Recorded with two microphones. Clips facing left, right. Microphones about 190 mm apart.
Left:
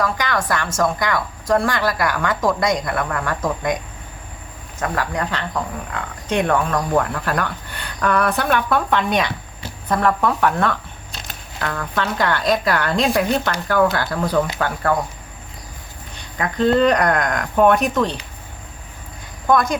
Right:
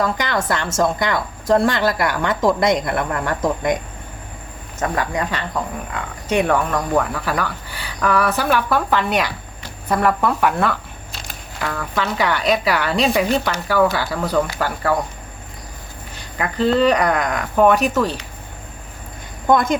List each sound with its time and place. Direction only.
0.0 s a woman's voice: 25° right (ahead or behind)
4.8 s speech: 15° right (ahead or behind)
16.4 s speech: 5° right (ahead or behind)